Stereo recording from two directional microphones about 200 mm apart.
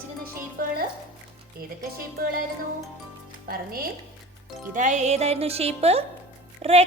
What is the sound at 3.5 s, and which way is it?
A woman's voice, 50° right (ahead or behind).